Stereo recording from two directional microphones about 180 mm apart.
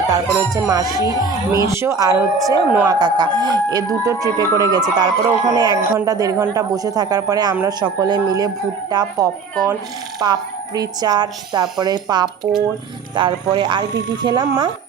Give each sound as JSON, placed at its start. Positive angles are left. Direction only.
{"t": 0.1, "sound": "speech", "side_deg": -20}